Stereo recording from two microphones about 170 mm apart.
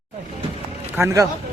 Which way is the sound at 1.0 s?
15° right (ahead or behind).